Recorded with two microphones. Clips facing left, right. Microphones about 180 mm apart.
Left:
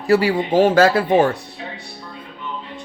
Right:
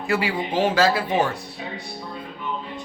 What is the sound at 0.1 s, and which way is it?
Speech, 40° left (ahead or behind).